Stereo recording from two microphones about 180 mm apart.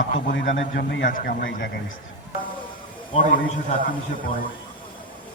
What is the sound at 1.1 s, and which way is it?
Speech, 50° left (ahead or behind).